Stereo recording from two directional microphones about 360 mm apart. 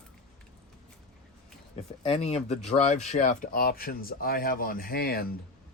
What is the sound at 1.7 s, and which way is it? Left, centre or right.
Speech, centre.